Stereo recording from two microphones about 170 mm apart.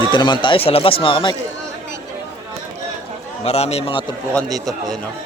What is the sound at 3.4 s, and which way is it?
Speech, 40° left (ahead or behind).